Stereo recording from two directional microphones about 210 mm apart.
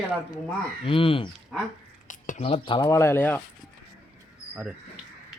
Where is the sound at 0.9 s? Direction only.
25° left (ahead or behind).